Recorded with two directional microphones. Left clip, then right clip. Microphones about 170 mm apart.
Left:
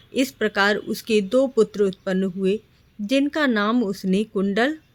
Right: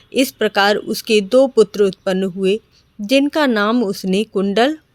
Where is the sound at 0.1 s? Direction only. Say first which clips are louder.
Right 6 dB; 45° right (ahead or behind).